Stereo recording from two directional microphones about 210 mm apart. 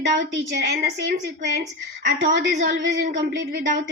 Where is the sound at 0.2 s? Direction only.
50° right (ahead or behind).